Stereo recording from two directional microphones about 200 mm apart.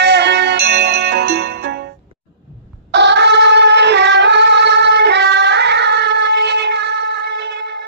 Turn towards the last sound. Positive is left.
turn(degrees=-60)  # may be behind; listen again after turning